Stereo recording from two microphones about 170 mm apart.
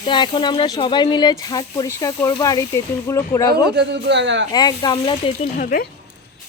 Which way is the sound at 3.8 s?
80° right.